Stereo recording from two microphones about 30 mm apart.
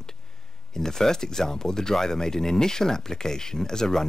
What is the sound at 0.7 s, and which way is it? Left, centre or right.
Speech, centre.